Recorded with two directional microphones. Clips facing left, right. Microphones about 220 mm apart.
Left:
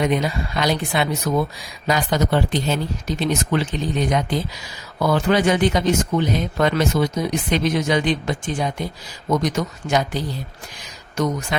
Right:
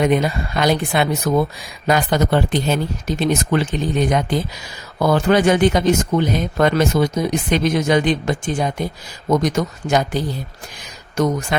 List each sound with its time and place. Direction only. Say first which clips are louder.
0.0 s speech: right 3 dB; 50° right (ahead or behind)